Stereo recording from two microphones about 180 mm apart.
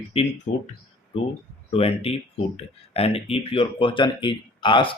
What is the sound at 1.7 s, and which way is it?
Speech, 35° left (ahead or behind).